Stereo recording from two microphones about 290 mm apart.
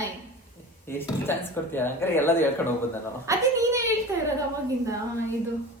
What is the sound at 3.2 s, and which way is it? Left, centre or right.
Speech, centre.